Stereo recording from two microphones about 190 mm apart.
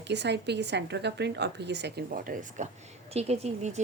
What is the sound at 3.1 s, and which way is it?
Speech, 35° right (ahead or behind).